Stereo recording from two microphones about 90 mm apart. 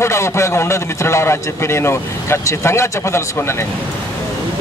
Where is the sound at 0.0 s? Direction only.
35° left (ahead or behind).